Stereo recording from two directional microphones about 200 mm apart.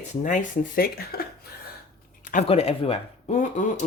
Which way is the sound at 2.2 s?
40° left (ahead or behind).